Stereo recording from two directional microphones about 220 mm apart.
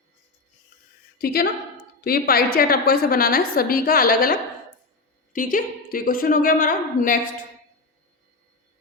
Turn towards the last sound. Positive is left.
turn(degrees=40)  # may be behind; listen again after turning